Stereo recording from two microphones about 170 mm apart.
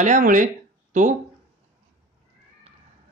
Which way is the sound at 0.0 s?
50° right (ahead or behind).